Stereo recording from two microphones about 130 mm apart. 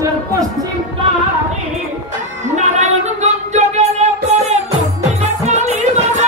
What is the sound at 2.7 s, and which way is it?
Music, 60° right (ahead or behind).